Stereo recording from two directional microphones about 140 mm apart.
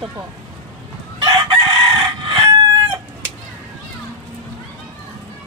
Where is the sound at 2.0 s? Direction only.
35° right (ahead or behind).